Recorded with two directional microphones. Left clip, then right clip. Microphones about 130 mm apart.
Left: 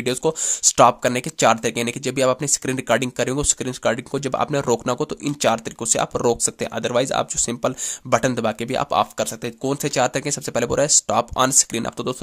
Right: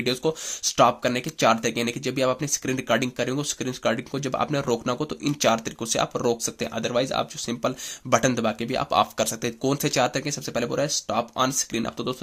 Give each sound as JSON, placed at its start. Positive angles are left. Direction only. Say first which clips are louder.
{"t": 0.0, "sound": "speech", "louder": "left 4 dB", "side_deg": 40}
{"t": 8.1, "sound": "speech", "louder": "left 2 dB", "side_deg": 30}